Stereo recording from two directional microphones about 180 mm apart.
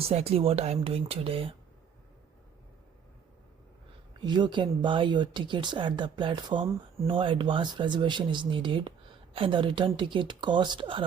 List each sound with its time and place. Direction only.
0.1 s speech: 35° right (ahead or behind)
4.2 s speech: 25° right (ahead or behind)